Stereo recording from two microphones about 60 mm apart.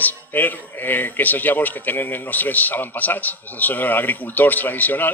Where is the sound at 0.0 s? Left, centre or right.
Left.